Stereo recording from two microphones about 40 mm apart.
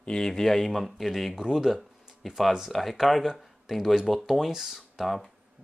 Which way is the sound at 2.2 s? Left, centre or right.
Centre.